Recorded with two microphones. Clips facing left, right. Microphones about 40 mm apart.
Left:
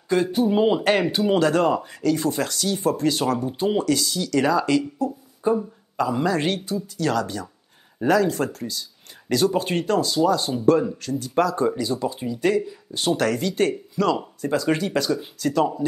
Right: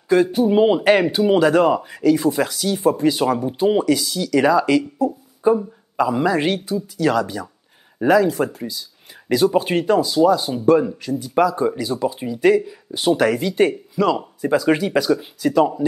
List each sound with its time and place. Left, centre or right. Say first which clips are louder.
0.1 s speech: right 5 dB; centre
0.5 s speech: right 5 dB; centre